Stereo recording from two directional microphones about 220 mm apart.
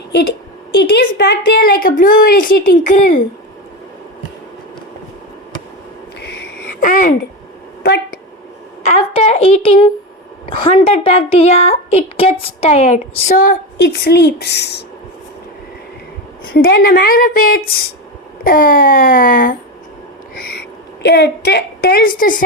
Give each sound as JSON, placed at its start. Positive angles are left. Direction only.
{"t": 0.8, "sound": "a woman's voice", "side_deg": 50}
{"t": 6.1, "sound": "a sound", "side_deg": 50}
{"t": 8.8, "sound": "a woman's voice", "side_deg": 30}
{"t": 16.5, "sound": "a woman's voice", "side_deg": 45}